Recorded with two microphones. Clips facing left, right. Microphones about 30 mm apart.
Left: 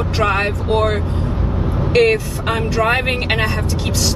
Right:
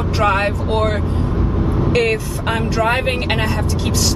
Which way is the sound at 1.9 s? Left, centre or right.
Centre.